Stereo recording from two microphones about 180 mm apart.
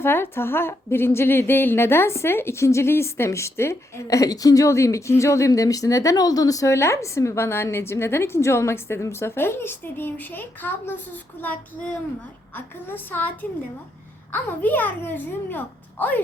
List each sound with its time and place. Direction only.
0.0 s a woman's voice: 15° left (ahead or behind)
12.5 s a woman's voice: 10° left (ahead or behind)